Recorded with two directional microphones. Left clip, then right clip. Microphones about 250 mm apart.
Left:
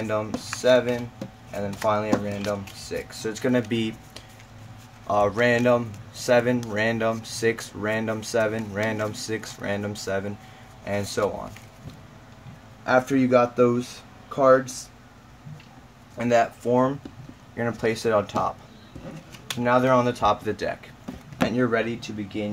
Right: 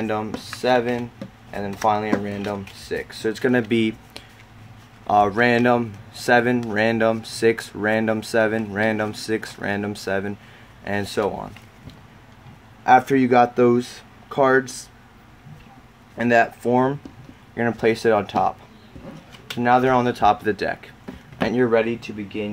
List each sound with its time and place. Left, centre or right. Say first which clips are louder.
0.6 s speech: even; right
12.8 s speech: right 6 dB; right
16.2 s speech: right 3 dB; right
19.6 s speech: right 3 dB; right